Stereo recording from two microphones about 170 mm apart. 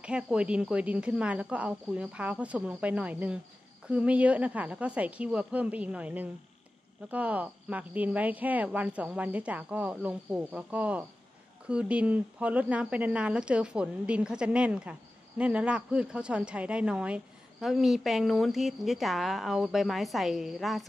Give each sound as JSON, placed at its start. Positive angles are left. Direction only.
{"t": 0.0, "sound": "speech", "side_deg": -5}